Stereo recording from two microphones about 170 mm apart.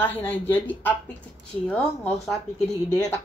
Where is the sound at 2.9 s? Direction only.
20° left (ahead or behind).